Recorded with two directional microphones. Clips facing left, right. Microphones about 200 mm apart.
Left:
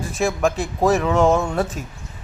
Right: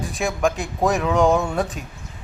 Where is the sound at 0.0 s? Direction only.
Centre (ahead or behind).